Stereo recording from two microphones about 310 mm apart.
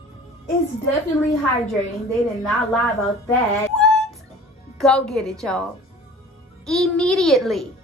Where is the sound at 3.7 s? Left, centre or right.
Centre.